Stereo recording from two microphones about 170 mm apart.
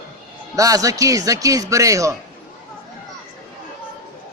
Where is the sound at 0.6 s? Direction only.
20° right (ahead or behind).